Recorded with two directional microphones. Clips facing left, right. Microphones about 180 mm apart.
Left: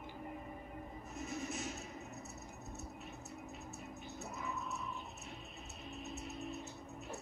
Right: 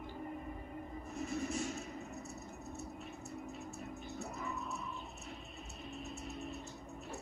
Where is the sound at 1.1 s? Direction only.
Centre (ahead or behind).